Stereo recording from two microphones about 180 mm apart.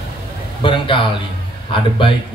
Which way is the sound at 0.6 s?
30° left (ahead or behind).